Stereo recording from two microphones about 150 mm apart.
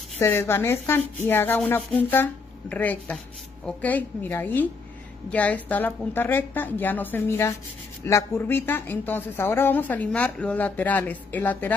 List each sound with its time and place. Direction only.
0.2 s speech: 15° left (ahead or behind)